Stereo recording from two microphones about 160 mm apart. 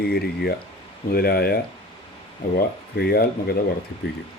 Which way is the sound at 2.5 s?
75° left (ahead or behind).